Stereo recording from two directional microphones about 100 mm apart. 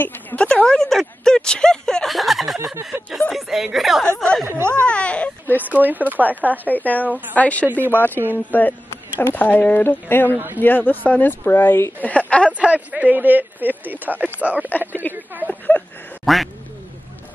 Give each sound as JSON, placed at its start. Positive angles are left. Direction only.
{"t": 0.0, "sound": "a woman's voice", "side_deg": 20}
{"t": 0.5, "sound": "speech", "side_deg": 10}
{"t": 4.5, "sound": "speech", "side_deg": -25}
{"t": 4.8, "sound": "a child's voice", "side_deg": 10}
{"t": 5.6, "sound": "speech", "side_deg": -15}
{"t": 6.7, "sound": "speech", "side_deg": 15}
{"t": 10.3, "sound": "speech", "side_deg": -20}
{"t": 10.6, "sound": "speech", "side_deg": 20}
{"t": 12.5, "sound": "speech", "side_deg": -15}
{"t": 14.7, "sound": "speech", "side_deg": 20}
{"t": 16.3, "sound": "speech", "side_deg": 0}